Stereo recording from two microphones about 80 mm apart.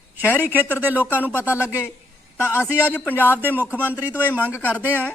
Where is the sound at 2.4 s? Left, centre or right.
Left.